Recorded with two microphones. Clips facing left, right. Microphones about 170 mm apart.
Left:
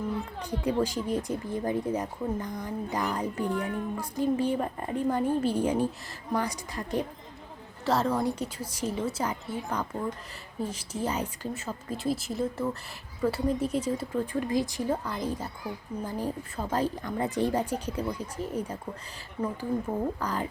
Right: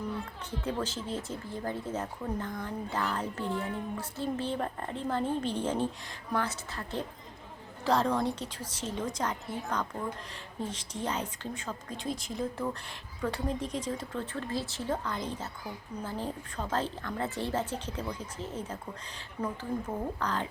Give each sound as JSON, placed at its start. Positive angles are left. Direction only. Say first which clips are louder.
{"t": 0.3, "sound": "speech", "louder": "left 9 dB", "side_deg": 10}
{"t": 3.5, "sound": "speech", "louder": "left 3 dB", "side_deg": 55}
{"t": 3.9, "sound": "speech", "louder": "left 6 dB", "side_deg": 15}
{"t": 7.9, "sound": "speech", "louder": "left 1 dB", "side_deg": 5}
{"t": 19.4, "sound": "speech", "louder": "left 4 dB", "side_deg": 0}